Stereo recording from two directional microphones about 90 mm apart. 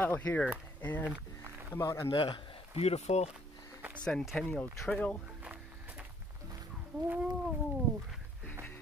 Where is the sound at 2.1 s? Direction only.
65° left (ahead or behind).